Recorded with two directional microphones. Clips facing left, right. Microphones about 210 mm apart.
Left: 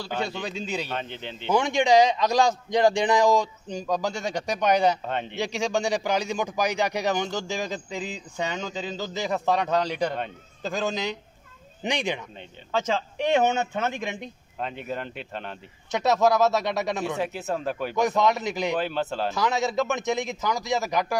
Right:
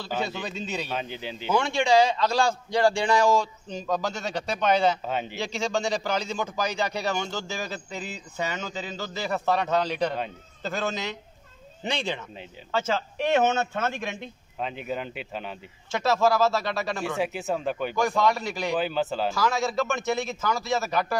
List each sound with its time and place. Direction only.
0.1 s speech: 5° right (ahead or behind)
0.6 s a man's voice: 10° left (ahead or behind)
0.8 s speech: 5° right (ahead or behind)
1.5 s a man's voice: 15° left (ahead or behind)
5.0 s speech: 5° right (ahead or behind)
5.4 s a man's voice: 15° left (ahead or behind)
14.6 s speech: centre (ahead or behind)
15.9 s speech: 20° left (ahead or behind)
17.0 s speech: centre (ahead or behind)
17.9 s speech: 20° left (ahead or behind)
18.8 s speech: centre (ahead or behind)
19.3 s a man's voice: 20° left (ahead or behind)